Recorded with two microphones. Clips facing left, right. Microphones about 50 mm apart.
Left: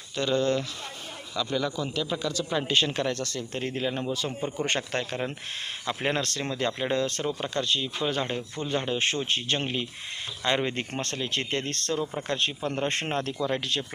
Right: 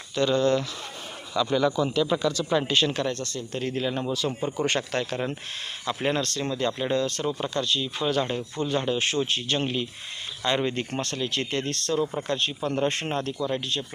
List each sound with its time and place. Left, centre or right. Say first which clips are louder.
0.2 s speech: right 3 dB; centre
1.4 s a man's voice: right 6 dB; centre
3.5 s speech: right 3 dB; left
4.3 s speech: right 3 dB; centre
4.5 s speech: right 1 dB; left
6.1 s speech: right 2 dB; left
8.0 s speech: right 5 dB; centre; by 12.5 s left
12.6 s speech: right 6 dB; left
12.9 s speech: even; left
13.5 s speech: even; left